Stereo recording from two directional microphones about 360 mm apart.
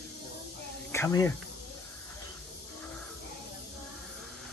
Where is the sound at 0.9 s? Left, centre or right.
Centre.